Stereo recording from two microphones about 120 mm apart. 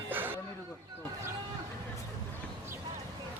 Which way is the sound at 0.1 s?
15° right (ahead or behind).